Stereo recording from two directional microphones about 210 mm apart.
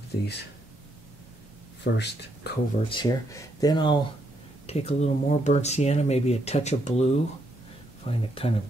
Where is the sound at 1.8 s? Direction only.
55° left (ahead or behind).